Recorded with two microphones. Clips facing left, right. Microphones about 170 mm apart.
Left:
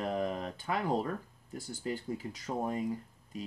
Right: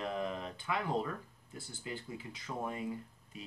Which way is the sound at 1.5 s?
40° left (ahead or behind).